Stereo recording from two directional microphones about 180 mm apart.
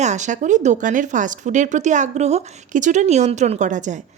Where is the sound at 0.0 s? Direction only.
40° right (ahead or behind).